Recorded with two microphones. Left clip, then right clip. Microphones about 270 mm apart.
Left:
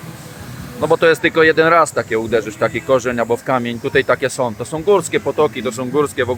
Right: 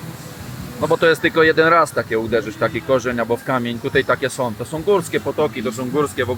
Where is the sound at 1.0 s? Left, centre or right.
Centre.